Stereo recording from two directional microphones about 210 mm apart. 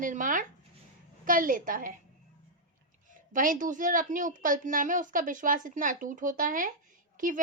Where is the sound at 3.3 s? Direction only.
40° right (ahead or behind).